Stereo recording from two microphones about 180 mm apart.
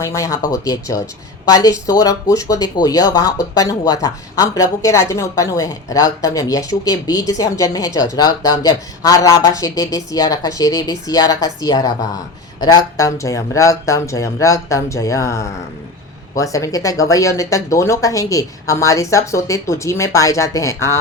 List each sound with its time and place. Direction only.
0.0 s speech: 15° left (ahead or behind)